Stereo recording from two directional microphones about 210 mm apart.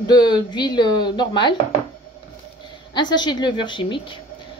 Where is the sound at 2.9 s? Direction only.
20° left (ahead or behind).